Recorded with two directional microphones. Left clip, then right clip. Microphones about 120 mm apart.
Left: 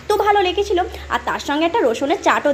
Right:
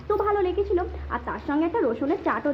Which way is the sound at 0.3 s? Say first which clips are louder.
Left 7 dB; 10° left (ahead or behind).